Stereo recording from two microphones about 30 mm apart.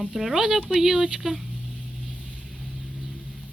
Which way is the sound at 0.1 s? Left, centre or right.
Centre.